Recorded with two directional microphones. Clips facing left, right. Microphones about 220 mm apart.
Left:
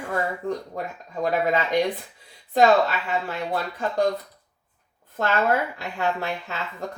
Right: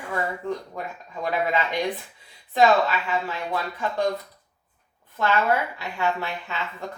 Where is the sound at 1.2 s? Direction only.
40° left (ahead or behind).